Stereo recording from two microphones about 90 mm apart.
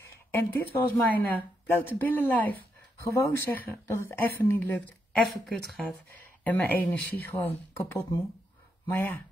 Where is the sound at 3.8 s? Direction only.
35° left (ahead or behind).